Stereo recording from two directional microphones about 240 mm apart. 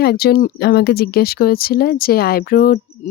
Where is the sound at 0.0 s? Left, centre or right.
Left.